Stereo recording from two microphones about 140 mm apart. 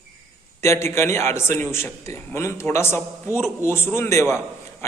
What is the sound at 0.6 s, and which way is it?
A man's voice, 20° left (ahead or behind).